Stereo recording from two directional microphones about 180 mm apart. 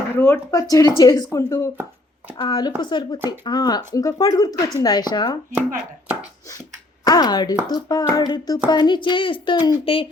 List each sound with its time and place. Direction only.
0.2 s speech: 15° left (ahead or behind)
7.0 s speech: 20° left (ahead or behind)